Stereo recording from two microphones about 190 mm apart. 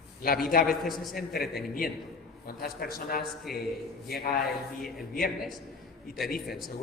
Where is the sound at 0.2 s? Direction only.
50° left (ahead or behind).